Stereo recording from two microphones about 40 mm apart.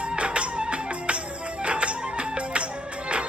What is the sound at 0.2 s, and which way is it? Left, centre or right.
Music, right.